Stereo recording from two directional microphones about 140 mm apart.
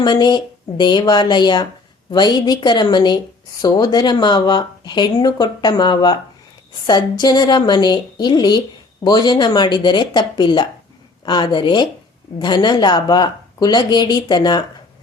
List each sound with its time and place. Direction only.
0.0 s speech: 30° left (ahead or behind)